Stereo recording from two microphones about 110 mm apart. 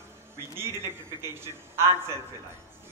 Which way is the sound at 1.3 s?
25° right (ahead or behind).